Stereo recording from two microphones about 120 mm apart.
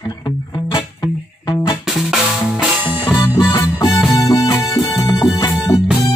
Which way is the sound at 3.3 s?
30° left (ahead or behind).